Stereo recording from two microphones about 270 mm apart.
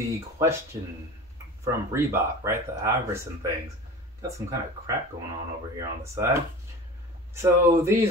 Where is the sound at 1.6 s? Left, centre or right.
Centre.